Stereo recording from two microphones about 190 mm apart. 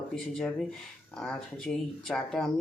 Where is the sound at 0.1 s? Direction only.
5° left (ahead or behind).